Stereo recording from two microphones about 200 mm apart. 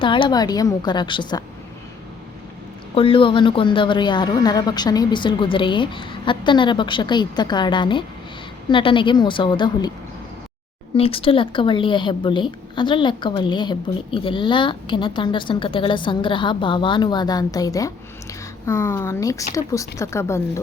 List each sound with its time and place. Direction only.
0.0 s a woman's voice: 25° left (ahead or behind)
2.9 s a woman's voice: 25° left (ahead or behind)
10.9 s a woman's voice: 30° left (ahead or behind)